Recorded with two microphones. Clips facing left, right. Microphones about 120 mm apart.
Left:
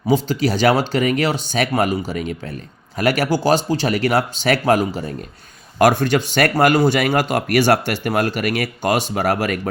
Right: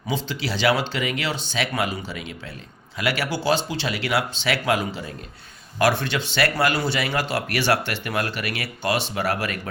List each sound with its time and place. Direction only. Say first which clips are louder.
0.1 s speech: left 10 dB; 45° left (ahead or behind)